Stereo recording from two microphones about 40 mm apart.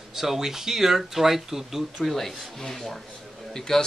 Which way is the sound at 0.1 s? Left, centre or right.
Centre.